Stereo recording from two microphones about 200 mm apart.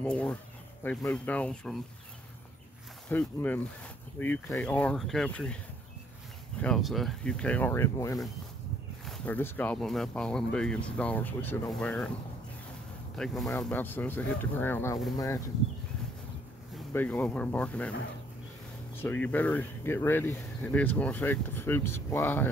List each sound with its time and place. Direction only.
0.0 s speech: 5° left (ahead or behind)
3.1 s speech: 10° left (ahead or behind)
6.6 s speech: centre (ahead or behind)
13.1 s speech: centre (ahead or behind)
16.9 s speech: 10° left (ahead or behind)
18.9 s speech: 10° left (ahead or behind)